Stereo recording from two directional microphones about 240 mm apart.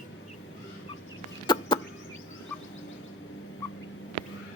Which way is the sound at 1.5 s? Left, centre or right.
Centre.